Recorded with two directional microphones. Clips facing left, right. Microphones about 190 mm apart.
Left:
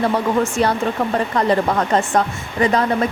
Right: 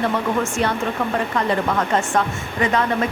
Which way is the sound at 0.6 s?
35° left (ahead or behind).